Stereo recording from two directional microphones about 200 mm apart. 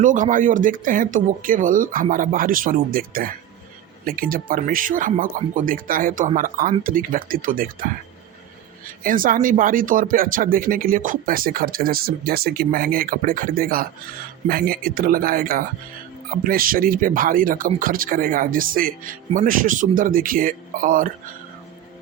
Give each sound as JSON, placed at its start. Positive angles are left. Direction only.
{"t": 0.0, "sound": "speech", "side_deg": -40}
{"t": 9.0, "sound": "speech", "side_deg": -45}